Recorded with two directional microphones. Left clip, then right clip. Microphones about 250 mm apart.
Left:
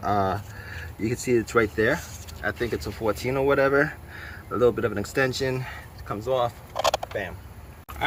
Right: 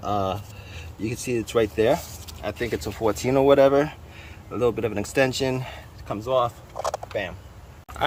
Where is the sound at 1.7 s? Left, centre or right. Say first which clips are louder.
Right 3 dB; centre.